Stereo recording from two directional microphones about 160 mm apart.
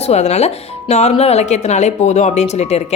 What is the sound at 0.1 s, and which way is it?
A woman's voice, 45° left (ahead or behind).